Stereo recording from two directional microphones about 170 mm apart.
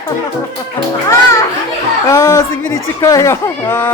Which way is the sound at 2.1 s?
20° left (ahead or behind).